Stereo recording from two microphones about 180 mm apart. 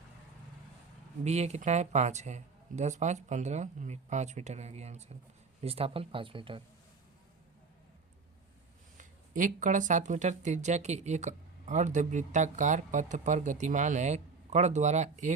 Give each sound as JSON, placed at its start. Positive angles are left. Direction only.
{"t": 1.2, "sound": "speech", "side_deg": -35}
{"t": 9.0, "sound": "speech", "side_deg": -45}